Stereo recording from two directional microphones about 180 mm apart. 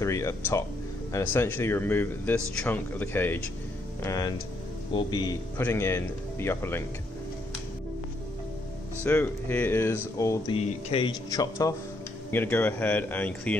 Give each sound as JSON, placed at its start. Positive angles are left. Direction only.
{"t": 0.0, "sound": "speech", "side_deg": 15}
{"t": 5.6, "sound": "speech", "side_deg": 10}
{"t": 9.0, "sound": "speech", "side_deg": 10}
{"t": 10.5, "sound": "speech", "side_deg": 30}